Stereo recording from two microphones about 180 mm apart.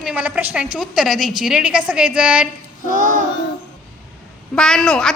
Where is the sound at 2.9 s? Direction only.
45° right (ahead or behind).